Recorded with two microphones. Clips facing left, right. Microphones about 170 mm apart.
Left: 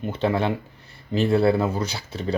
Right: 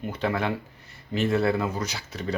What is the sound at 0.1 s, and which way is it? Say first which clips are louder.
Speech: left 4 dB; 25° left (ahead or behind).